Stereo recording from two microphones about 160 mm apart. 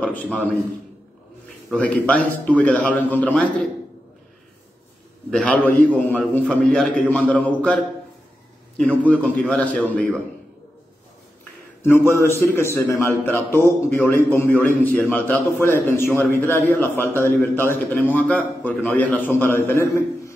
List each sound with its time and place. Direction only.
0.0 s a man's voice: 10° left (ahead or behind)
1.7 s a man's voice: 5° left (ahead or behind)
5.3 s a man's voice: 5° left (ahead or behind)
11.8 s a man's voice: 15° left (ahead or behind)